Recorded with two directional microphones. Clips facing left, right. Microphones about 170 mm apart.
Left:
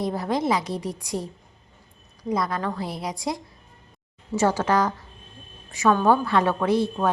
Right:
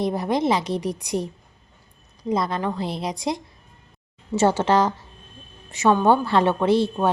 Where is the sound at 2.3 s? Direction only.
25° right (ahead or behind).